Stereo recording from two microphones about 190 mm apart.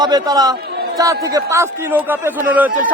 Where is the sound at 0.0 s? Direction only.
20° right (ahead or behind).